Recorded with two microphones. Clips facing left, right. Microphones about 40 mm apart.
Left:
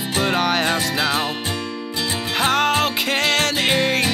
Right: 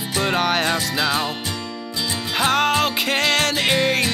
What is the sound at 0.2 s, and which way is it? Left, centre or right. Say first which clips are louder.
Music: even; centre.